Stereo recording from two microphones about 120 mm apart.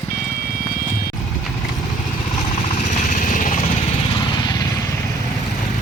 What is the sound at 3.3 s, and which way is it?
Vehicle, 90° left.